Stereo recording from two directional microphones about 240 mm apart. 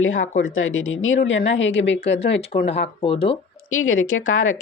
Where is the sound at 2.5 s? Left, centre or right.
Left.